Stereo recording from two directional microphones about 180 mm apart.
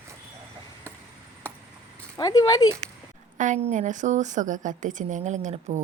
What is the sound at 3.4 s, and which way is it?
A woman's voice, 40° right (ahead or behind).